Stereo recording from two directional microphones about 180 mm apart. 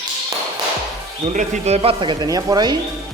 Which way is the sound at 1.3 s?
40° right (ahead or behind).